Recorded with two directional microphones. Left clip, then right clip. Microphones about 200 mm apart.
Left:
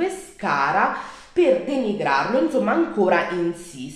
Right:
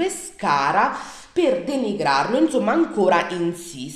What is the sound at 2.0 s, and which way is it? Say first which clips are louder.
A woman's voice: right 2 dB; 45° right (ahead or behind).